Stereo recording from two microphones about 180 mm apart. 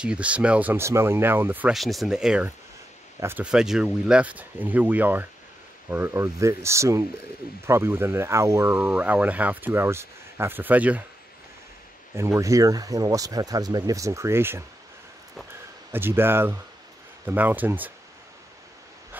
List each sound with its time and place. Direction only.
0.0 s speech: 5° right (ahead or behind)
12.2 s speech: 15° right (ahead or behind)
15.9 s speech: 10° right (ahead or behind)